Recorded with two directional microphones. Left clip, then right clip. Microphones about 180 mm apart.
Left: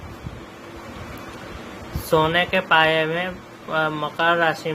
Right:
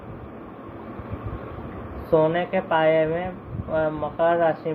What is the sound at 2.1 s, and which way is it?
Speech, 45° left (ahead or behind).